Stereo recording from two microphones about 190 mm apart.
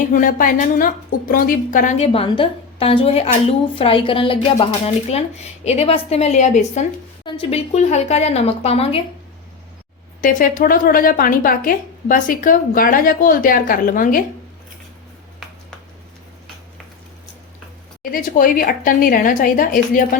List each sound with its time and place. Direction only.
0.1 s a woman's voice: 45° left (ahead or behind)
10.2 s a woman's voice: 45° left (ahead or behind)
18.1 s a woman's voice: 45° left (ahead or behind)